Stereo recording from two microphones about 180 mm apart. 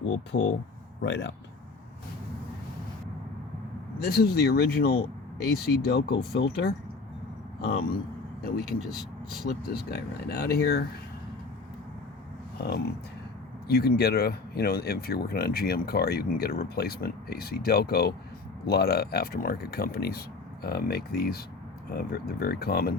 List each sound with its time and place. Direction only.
0.0 s speech: 80° left
4.0 s speech: 60° left (ahead or behind)
8.4 s speech: 55° left (ahead or behind)
12.5 s speech: 60° left (ahead or behind)